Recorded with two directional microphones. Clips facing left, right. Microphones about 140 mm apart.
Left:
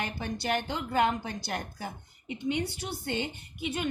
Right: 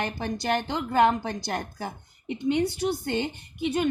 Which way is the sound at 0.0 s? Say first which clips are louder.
Right 4 dB; 45° right (ahead or behind).